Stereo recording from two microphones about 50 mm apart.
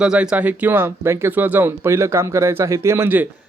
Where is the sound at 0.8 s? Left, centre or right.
Right.